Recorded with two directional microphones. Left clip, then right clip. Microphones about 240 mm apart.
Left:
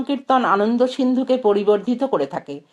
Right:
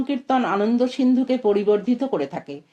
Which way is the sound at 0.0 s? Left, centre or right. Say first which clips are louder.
Left 4 dB; left.